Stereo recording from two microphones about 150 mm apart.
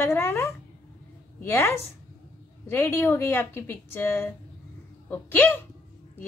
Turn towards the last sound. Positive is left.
turn(degrees=15)  # may be behind; listen again after turning